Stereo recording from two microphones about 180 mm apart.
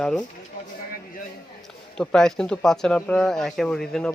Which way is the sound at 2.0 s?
5° left (ahead or behind).